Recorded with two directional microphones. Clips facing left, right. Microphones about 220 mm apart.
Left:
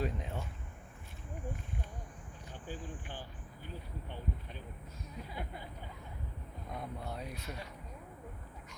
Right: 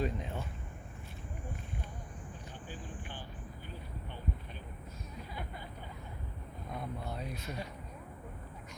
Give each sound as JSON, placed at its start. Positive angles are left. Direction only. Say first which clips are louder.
{"t": 0.0, "sound": "speech", "louder": "right 2 dB", "side_deg": 5}
{"t": 6.7, "sound": "speech", "louder": "right 1 dB", "side_deg": 10}